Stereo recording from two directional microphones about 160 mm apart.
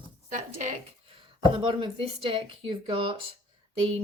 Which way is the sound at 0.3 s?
50° right (ahead or behind).